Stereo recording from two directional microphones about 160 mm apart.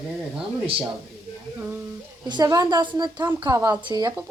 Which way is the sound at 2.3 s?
25° right (ahead or behind).